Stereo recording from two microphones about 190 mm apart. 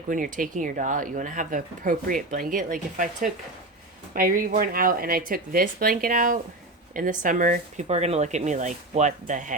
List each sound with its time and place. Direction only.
0.1 s speech: 45° right (ahead or behind)